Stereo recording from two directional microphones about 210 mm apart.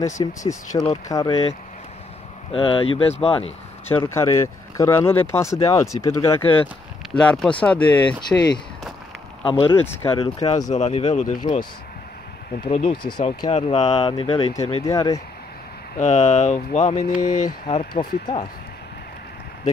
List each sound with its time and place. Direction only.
0.0 s speech: 15° left (ahead or behind)
2.5 s speech: 25° left (ahead or behind)
4.0 s speech: 15° left (ahead or behind)
9.5 s speech: 25° left (ahead or behind)
10.7 s speech: 30° left (ahead or behind)
12.6 s speech: 25° left (ahead or behind)
14.9 s speech: 15° left (ahead or behind)
16.0 s speech: 35° left (ahead or behind)
17.6 s speech: 25° left (ahead or behind)